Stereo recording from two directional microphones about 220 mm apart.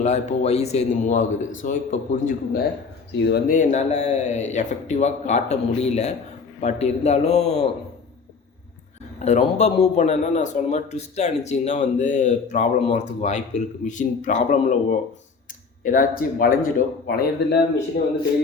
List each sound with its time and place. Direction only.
0.0 s speech: 30° left (ahead or behind)
9.1 s speech: 30° left (ahead or behind)